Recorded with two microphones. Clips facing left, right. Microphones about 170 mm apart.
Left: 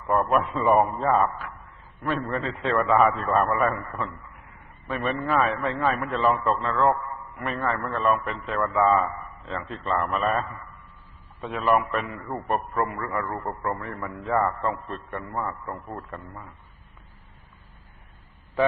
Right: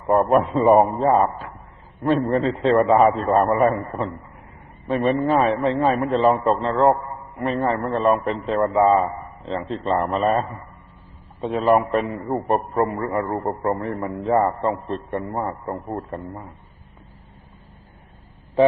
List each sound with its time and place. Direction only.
0.0 s a man's voice: 30° right (ahead or behind)